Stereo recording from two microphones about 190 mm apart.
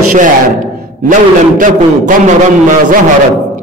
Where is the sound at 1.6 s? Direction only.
40° right (ahead or behind).